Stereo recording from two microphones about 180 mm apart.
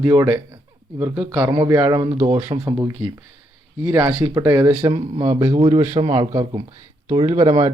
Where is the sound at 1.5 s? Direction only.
20° right (ahead or behind).